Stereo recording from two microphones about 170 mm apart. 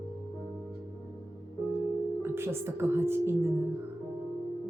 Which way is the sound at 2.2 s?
15° right (ahead or behind).